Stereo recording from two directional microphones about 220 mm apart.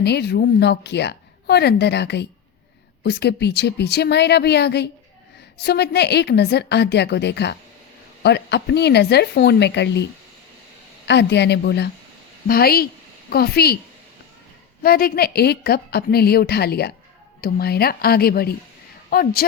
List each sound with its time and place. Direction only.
0.0 s a woman's voice: 50° left (ahead or behind)
14.8 s a woman's voice: 45° left (ahead or behind)